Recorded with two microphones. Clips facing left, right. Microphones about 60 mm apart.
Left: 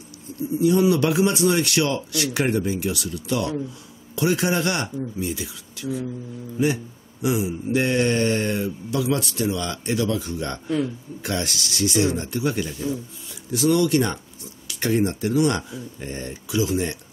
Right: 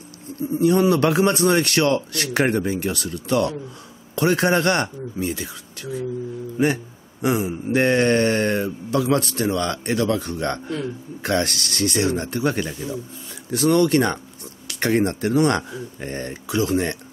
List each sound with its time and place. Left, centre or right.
0.4 s speech: right